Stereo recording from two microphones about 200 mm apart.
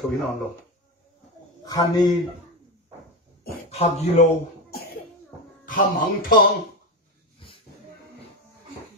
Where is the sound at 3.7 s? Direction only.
30° left (ahead or behind).